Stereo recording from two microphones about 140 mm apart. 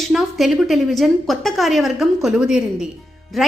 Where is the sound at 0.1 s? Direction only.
Centre (ahead or behind).